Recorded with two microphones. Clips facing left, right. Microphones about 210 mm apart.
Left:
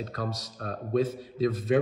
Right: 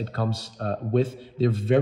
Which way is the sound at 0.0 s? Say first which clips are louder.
Right 5 dB; 30° right (ahead or behind).